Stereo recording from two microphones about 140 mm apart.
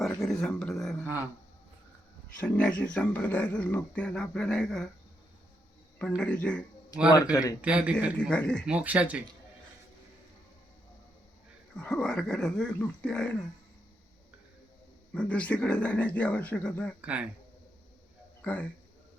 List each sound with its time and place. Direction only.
0.0 s a sound: 5° left (ahead or behind)
2.4 s speech: 10° left (ahead or behind)
6.0 s speech: 10° left (ahead or behind)
6.9 s speech: 25° left (ahead or behind)
7.6 s speech: 10° right (ahead or behind)
8.2 s speech: 5° left (ahead or behind)
8.6 s speech: 10° right (ahead or behind)
11.8 s speech: 5° left (ahead or behind)
15.1 s speech: 10° left (ahead or behind)
17.0 s speech: 10° right (ahead or behind)
18.4 s speech: 10° left (ahead or behind)